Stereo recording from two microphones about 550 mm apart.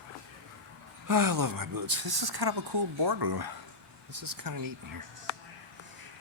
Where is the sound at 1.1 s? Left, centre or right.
Right.